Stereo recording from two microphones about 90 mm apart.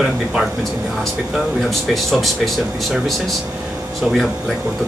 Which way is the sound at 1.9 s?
Centre (ahead or behind).